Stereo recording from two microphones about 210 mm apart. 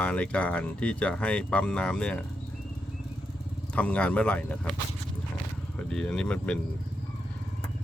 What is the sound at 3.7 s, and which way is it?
Speech, 5° left (ahead or behind).